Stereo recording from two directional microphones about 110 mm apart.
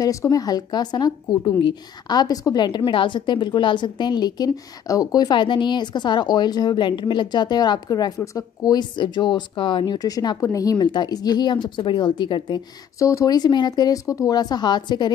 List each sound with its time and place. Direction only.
0.0 s a woman's voice: 30° left (ahead or behind); by 9.9 s 50° left (ahead or behind)
9.9 s a woman's voice: 35° left (ahead or behind)
13.0 s a woman's voice: 30° left (ahead or behind)